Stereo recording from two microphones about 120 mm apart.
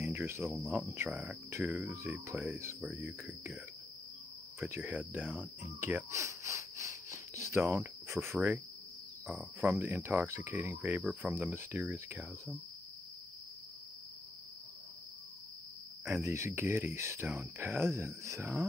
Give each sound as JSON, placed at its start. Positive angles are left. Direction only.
{"t": 0.0, "sound": "speech", "side_deg": -15}
{"t": 1.1, "sound": "speech", "side_deg": 0}
{"t": 1.5, "sound": "speech", "side_deg": -20}
{"t": 4.6, "sound": "speech", "side_deg": -20}
{"t": 7.7, "sound": "cricket", "side_deg": -20}
{"t": 9.6, "sound": "speech", "side_deg": -15}
{"t": 16.1, "sound": "speech", "side_deg": -25}